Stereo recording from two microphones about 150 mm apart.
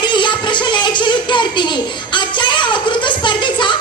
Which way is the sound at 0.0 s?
30° left (ahead or behind).